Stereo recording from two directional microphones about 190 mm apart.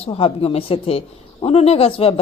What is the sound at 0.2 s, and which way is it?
Speech, 30° left (ahead or behind).